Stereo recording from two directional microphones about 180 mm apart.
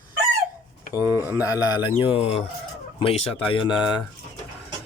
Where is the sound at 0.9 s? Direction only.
10° right (ahead or behind).